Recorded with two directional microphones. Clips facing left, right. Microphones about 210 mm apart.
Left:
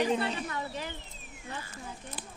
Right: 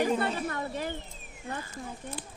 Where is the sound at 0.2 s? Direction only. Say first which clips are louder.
Right 3 dB; 50° right (ahead or behind).